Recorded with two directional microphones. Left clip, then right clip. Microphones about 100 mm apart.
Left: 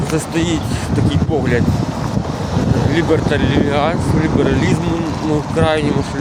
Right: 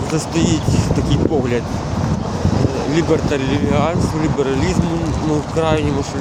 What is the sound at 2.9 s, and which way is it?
Speech, 15° right (ahead or behind).